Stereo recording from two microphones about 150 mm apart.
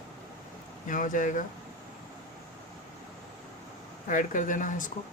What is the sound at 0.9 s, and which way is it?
Speech, 60° left (ahead or behind).